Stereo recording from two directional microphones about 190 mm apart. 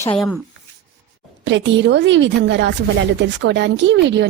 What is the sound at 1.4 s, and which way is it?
Speech, 75° right (ahead or behind).